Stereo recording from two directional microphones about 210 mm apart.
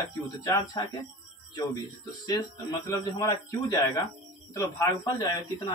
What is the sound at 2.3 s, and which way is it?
A man's voice, 15° left (ahead or behind).